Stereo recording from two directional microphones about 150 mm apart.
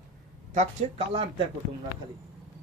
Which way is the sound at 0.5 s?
40° right (ahead or behind).